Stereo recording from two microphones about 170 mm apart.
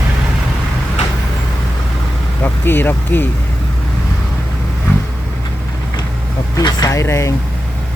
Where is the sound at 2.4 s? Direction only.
10° left (ahead or behind).